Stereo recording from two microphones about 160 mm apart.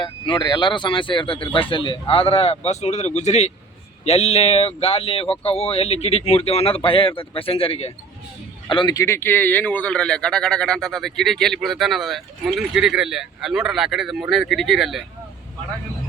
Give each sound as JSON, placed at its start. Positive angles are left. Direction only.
{"t": 0.0, "sound": "speech", "side_deg": 30}
{"t": 8.7, "sound": "speech", "side_deg": 30}